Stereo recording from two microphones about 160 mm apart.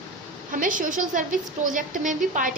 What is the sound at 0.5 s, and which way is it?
A woman's voice, 55° right (ahead or behind).